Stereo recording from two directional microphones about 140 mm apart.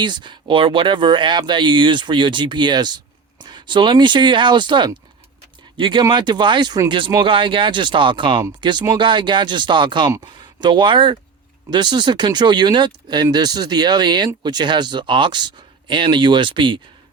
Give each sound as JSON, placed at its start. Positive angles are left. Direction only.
{"t": 0.0, "sound": "speech", "side_deg": -35}